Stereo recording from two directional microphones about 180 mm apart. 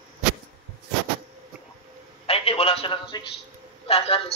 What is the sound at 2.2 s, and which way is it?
A man's voice, 35° left (ahead or behind).